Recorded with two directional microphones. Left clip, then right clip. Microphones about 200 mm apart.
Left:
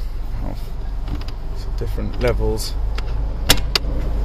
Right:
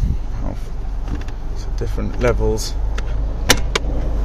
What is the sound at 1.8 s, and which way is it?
Speech, 10° right (ahead or behind).